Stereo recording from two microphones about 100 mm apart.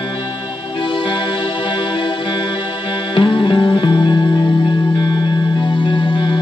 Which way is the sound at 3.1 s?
60° left (ahead or behind).